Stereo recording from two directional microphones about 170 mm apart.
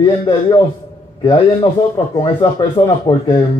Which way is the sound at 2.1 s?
25° left (ahead or behind).